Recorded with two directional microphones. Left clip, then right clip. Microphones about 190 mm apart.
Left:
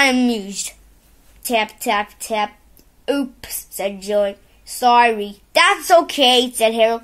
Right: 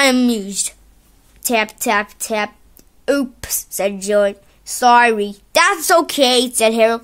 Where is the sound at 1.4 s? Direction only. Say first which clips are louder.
Right 2 dB; 55° right (ahead or behind).